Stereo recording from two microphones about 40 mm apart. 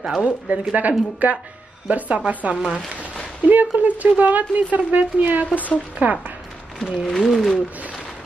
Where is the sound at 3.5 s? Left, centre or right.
Right.